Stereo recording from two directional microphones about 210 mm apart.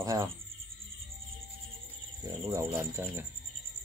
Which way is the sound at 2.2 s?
15° right (ahead or behind).